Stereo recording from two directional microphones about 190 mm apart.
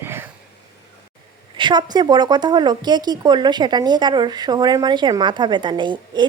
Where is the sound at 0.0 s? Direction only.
10° right (ahead or behind).